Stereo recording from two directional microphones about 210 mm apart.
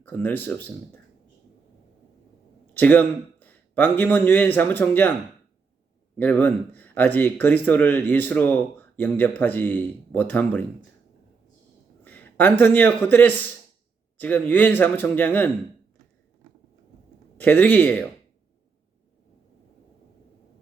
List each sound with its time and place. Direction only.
0.0 s speech: 10° left (ahead or behind)
2.7 s a man's voice: 10° left (ahead or behind)
6.1 s speech: 10° left (ahead or behind)
12.0 s a man's voice: 10° left (ahead or behind)
17.3 s speech: 10° left (ahead or behind)